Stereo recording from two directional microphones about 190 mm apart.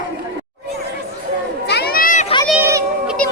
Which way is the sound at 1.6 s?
55° left (ahead or behind).